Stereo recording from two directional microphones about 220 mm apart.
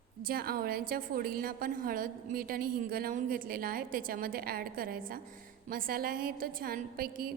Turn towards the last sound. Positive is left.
turn(degrees=-40)  # may be behind; listen again after turning